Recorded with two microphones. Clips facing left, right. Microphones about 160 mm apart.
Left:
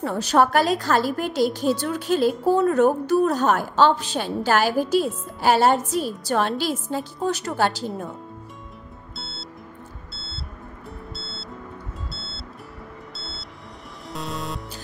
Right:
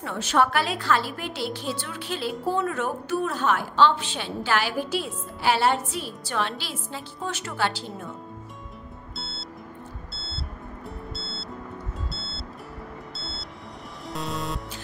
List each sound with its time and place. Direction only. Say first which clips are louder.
0.0 s a woman's voice: left 4 dB; 35° left (ahead or behind)
9.1 s music: left 1 dB; centre (ahead or behind)